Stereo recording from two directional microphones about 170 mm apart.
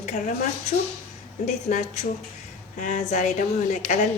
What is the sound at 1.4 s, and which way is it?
A woman's voice, 45° left (ahead or behind).